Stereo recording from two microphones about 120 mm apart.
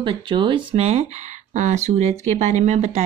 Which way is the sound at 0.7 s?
65° right (ahead or behind).